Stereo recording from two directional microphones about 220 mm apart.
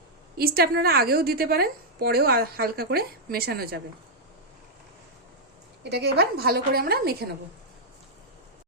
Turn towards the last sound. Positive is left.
turn(degrees=-45)  # may be behind; listen again after turning